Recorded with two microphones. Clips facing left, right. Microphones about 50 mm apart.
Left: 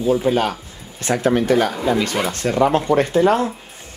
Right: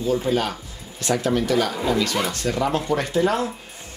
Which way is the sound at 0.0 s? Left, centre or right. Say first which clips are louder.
Left 4 dB; left.